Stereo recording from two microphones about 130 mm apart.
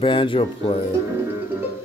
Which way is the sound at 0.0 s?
40° left (ahead or behind).